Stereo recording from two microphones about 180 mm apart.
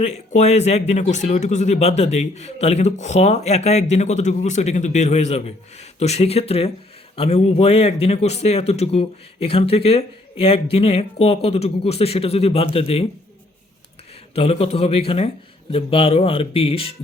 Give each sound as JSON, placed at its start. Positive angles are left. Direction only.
{"t": 0.0, "sound": "speech", "side_deg": 40}
{"t": 14.3, "sound": "speech", "side_deg": 35}